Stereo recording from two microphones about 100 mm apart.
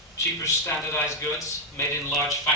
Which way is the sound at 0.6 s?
25° left (ahead or behind).